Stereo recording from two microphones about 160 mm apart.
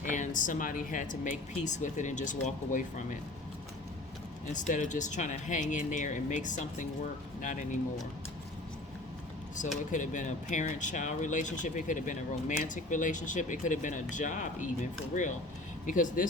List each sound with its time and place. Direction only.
0.0 s speech: 50° left (ahead or behind)
4.5 s speech: 50° left (ahead or behind)
9.6 s speech: 50° left (ahead or behind)